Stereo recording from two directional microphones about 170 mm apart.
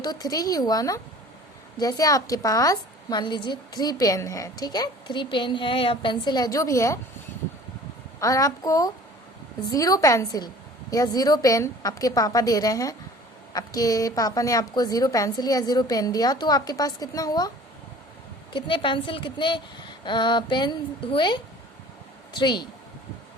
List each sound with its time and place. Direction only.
0.0 s a woman's voice: 25° left (ahead or behind)
8.2 s a woman's voice: 20° left (ahead or behind)
18.5 s a woman's voice: 30° left (ahead or behind)